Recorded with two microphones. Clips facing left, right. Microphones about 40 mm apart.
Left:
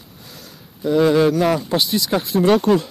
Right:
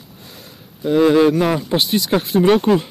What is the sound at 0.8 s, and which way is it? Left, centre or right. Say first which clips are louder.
Speech: right 2 dB; right.